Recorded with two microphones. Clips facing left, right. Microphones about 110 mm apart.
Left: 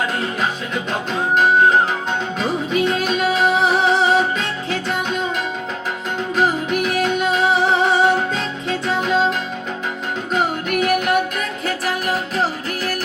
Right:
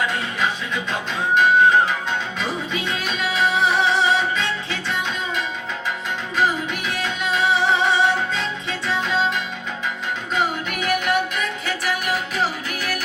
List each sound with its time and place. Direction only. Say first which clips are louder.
0.0 s music: left 2 dB; 40° left (ahead or behind)
6.3 s music: left 3 dB; 40° left (ahead or behind)
10.3 s music: left 4 dB; 45° left (ahead or behind)